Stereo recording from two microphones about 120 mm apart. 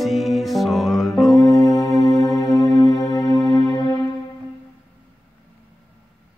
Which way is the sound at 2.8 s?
30° left (ahead or behind).